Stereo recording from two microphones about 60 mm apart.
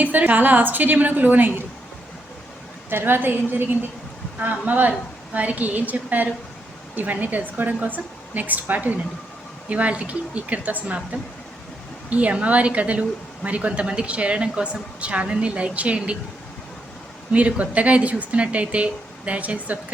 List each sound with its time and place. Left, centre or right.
0.0 s a woman's voice: right
2.9 s a woman's voice: right; by 16.1 s centre
17.3 s a woman's voice: right